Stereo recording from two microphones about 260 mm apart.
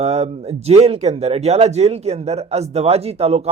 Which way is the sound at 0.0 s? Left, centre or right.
Right.